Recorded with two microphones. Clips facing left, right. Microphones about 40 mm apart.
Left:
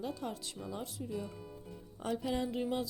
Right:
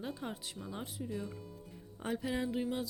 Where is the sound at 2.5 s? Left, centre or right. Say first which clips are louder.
Left 1 dB; centre.